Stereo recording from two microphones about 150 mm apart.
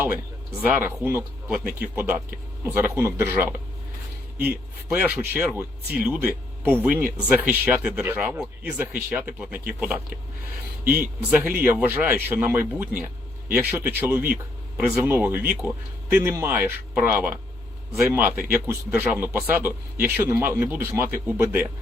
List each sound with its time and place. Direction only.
0.7 s a man's voice: 15° right (ahead or behind)
4.9 s a man's voice: 15° right (ahead or behind)